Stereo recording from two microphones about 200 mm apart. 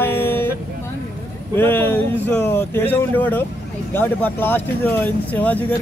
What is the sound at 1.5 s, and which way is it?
Speech, 10° left (ahead or behind).